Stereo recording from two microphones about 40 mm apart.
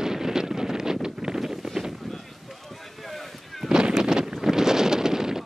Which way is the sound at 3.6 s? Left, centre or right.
Centre.